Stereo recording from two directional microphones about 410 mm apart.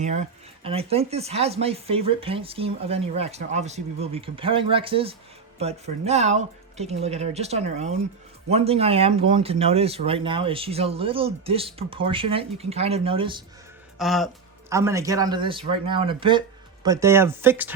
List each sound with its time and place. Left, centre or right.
0.0 s speech: centre
14.0 s speech: centre